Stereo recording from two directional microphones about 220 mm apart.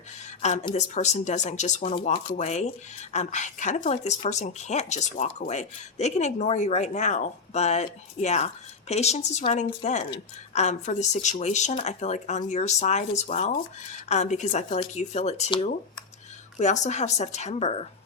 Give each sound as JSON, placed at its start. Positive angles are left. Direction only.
{"t": 0.6, "sound": "speech", "side_deg": 30}
{"t": 16.6, "sound": "speech", "side_deg": 35}